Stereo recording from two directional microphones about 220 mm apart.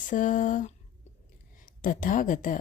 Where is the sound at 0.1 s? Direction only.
35° left (ahead or behind).